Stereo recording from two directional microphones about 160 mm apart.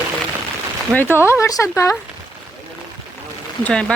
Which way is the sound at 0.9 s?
10° right (ahead or behind).